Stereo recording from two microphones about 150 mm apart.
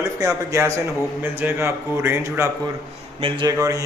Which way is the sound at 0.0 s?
20° right (ahead or behind).